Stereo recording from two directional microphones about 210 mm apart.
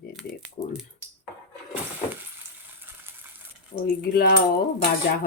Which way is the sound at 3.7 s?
40° left (ahead or behind).